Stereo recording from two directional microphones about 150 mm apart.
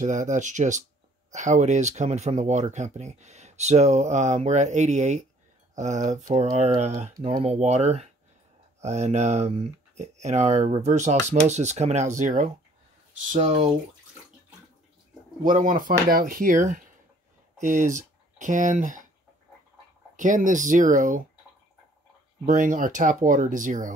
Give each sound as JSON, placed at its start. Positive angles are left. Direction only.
{"t": 0.0, "sound": "speech", "side_deg": -55}
{"t": 15.4, "sound": "speech", "side_deg": -65}
{"t": 20.2, "sound": "speech", "side_deg": -60}
{"t": 22.5, "sound": "speech", "side_deg": -60}